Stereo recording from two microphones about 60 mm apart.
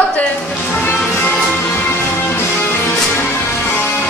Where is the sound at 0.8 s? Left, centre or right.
Left.